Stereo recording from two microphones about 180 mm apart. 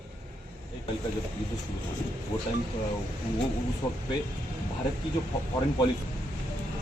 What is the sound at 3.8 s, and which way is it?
Speech, 25° left (ahead or behind).